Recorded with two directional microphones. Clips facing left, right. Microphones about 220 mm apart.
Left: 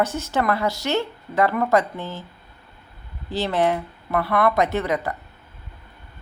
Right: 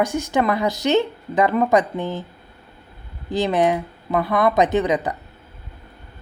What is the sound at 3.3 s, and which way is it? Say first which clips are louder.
A woman's voice: right 3 dB; 15° right (ahead or behind).